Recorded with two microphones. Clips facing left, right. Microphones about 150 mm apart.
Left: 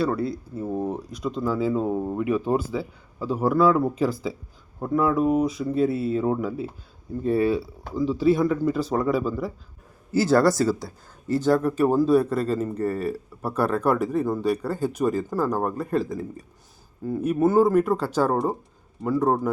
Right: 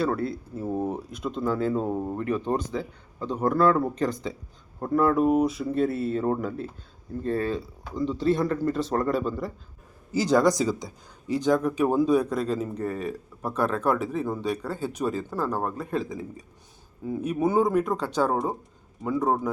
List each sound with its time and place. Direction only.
0.0 s speech: centre (ahead or behind)
10.1 s speech: 15° right (ahead or behind)
11.4 s speech: 5° left (ahead or behind)